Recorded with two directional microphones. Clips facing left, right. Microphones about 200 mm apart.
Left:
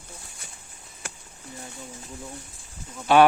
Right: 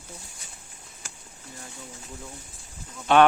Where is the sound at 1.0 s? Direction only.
60° left (ahead or behind).